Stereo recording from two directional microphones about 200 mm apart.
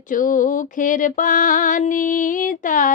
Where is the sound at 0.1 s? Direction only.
40° left (ahead or behind).